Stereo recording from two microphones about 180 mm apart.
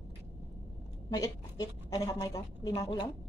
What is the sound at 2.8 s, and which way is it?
Speech, 25° left (ahead or behind).